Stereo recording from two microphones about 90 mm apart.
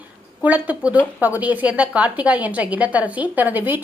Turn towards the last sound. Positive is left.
turn(degrees=-20)  # may be behind; listen again after turning